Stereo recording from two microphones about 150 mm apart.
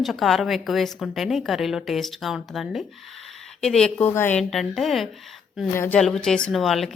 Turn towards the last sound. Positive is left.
turn(degrees=0)  # may be behind; listen again after turning